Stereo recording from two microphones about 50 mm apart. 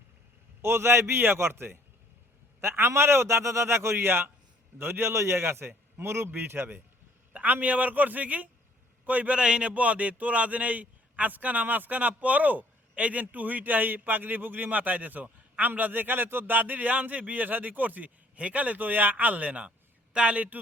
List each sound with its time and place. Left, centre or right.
0.6 s a man's voice: right
6.3 s speech: right
7.3 s a man's voice: right
9.3 s a man's voice: centre